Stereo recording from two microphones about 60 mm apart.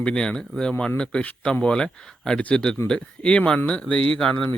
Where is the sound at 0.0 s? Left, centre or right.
Centre.